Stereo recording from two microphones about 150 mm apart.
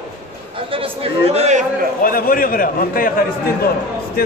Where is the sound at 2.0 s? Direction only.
70° left (ahead or behind).